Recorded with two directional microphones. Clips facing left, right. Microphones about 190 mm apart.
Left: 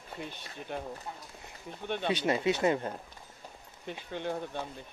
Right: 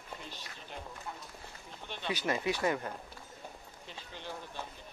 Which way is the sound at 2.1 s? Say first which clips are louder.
Left 4 dB; 25° left (ahead or behind).